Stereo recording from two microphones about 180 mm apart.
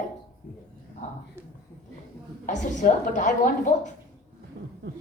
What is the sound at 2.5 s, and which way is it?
A woman's voice, 45° left (ahead or behind).